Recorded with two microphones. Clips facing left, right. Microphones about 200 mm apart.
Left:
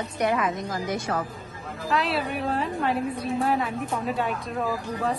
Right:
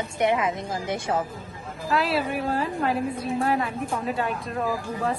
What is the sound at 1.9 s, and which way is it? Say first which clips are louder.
A woman's voice: right 2 dB; centre (ahead or behind).